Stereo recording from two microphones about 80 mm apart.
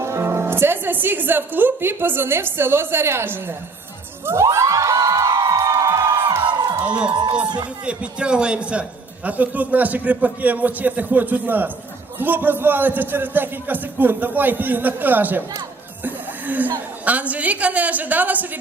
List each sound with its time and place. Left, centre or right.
0.0 s a woman's voice: right
4.4 s crowd: right
5.3 s music: right
6.2 s crowd: right
6.8 s a man's voice: centre
7.4 s speech: right
7.9 s a man's voice: centre
16.0 s music: right
17.1 s a man's voice: centre